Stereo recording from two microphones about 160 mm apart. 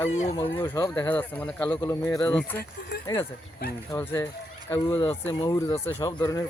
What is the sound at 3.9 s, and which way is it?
Speech, 15° left (ahead or behind).